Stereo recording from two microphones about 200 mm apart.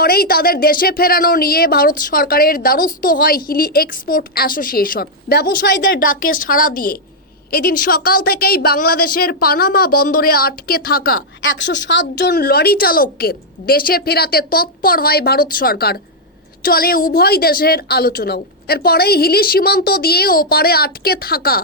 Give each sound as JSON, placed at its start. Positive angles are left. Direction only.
{"t": 0.0, "sound": "speech", "side_deg": 50}
{"t": 11.4, "sound": "speech", "side_deg": 65}